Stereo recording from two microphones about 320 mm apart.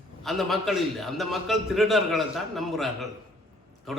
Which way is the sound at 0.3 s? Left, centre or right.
Centre.